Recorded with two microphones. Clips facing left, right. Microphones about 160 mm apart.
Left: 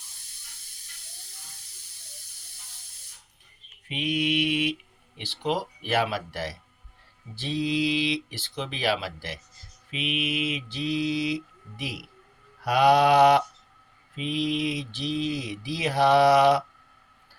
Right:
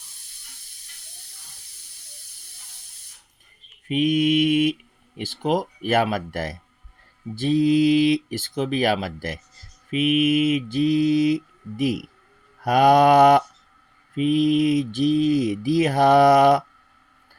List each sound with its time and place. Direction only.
3.8 s speech: 45° right (ahead or behind)